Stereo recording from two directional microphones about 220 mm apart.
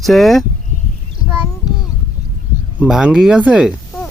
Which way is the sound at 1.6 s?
15° left (ahead or behind).